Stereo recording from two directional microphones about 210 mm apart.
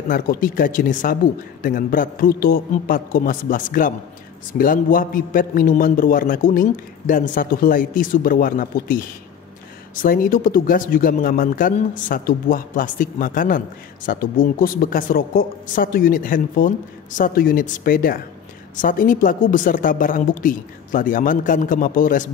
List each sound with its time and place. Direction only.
0.1 s a man's voice: 40° left (ahead or behind)